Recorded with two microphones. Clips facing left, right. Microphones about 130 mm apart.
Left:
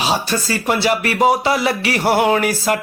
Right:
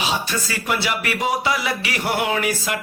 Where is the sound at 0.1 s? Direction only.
35° left (ahead or behind).